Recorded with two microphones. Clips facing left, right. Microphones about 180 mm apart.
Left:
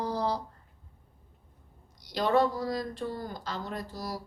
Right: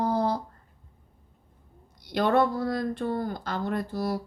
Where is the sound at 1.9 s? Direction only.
55° right (ahead or behind).